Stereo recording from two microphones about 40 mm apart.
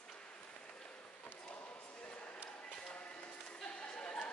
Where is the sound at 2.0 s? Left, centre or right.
Left.